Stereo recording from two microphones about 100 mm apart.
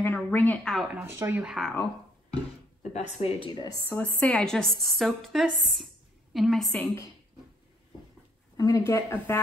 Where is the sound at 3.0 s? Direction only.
90° left.